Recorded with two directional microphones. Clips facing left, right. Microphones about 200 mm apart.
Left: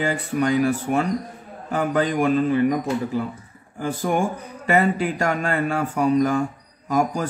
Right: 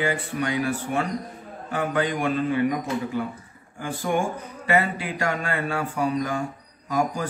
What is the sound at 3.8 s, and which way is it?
A man's voice, 40° left (ahead or behind).